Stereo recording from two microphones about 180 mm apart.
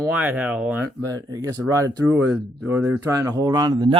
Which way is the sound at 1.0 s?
20° right (ahead or behind).